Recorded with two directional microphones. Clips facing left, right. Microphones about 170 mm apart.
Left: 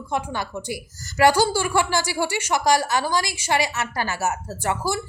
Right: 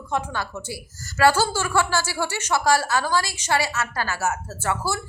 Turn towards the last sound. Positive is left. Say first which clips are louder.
# left 1 dB
turn(degrees=15)  # may be behind; listen again after turning